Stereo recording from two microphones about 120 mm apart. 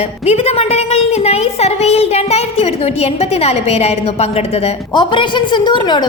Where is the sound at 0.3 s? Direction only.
55° left (ahead or behind).